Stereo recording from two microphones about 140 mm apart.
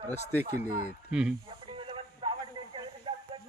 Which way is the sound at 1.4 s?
40° right (ahead or behind).